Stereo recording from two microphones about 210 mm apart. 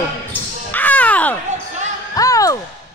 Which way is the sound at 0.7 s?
10° left (ahead or behind).